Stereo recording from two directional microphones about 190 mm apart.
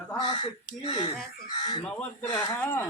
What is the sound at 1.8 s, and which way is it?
Speech, 10° left (ahead or behind).